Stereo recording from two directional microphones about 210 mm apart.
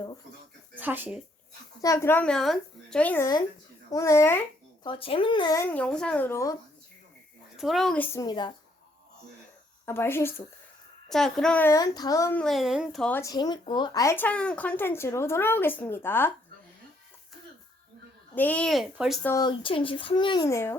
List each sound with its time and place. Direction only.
0.8 s speech: 10° right (ahead or behind)
1.8 s speech: 15° left (ahead or behind)
4.9 s a child's voice: 25° left (ahead or behind)
5.6 s speech: 5° left (ahead or behind)
7.6 s speech: centre (ahead or behind); by 8.5 s 20° left (ahead or behind)
9.8 s speech: 10° left (ahead or behind)
12.4 s speech: centre (ahead or behind)
18.3 s speech: 5° left (ahead or behind)
19.3 s a child's voice: 20° left (ahead or behind)